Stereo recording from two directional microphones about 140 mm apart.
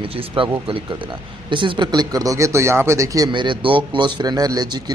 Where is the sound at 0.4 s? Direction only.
40° right (ahead or behind).